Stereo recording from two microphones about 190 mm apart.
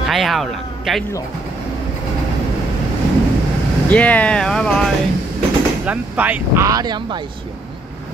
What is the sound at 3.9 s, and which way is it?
Speech, 5° left (ahead or behind).